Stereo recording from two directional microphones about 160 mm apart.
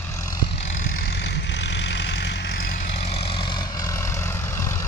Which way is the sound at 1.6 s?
90° left.